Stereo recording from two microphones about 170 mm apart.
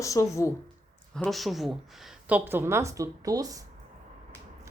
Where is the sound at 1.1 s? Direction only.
Centre (ahead or behind); by 3.6 s 20° right (ahead or behind).